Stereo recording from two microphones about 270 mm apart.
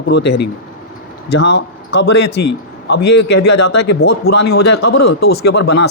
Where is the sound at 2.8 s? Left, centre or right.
Left.